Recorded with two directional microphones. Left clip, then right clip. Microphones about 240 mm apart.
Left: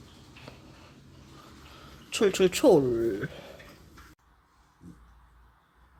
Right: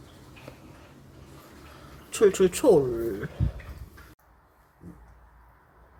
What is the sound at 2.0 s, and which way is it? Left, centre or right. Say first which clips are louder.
Speech: right 3 dB; centre.